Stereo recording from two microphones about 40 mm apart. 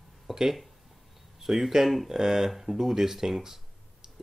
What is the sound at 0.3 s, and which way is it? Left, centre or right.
Speech, centre.